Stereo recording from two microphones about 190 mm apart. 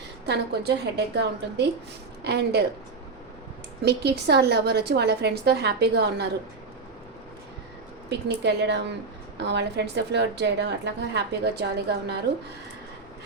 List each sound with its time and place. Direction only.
0.3 s a woman's voice: 60° right (ahead or behind)
3.8 s a woman's voice: 60° right (ahead or behind)
8.4 s a woman's voice: 65° right (ahead or behind)